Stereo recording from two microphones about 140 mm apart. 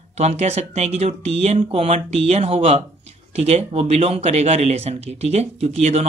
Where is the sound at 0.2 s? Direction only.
50° right (ahead or behind).